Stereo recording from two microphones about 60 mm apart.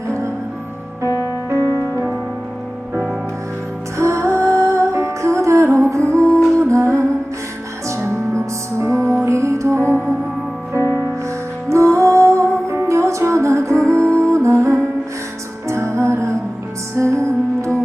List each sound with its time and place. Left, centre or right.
1.0 s music: left
1.5 s music: right
3.9 s music: right
11.7 s music: right